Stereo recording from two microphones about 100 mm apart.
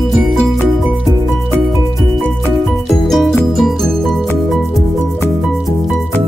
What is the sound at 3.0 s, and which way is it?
Music, 5° left (ahead or behind).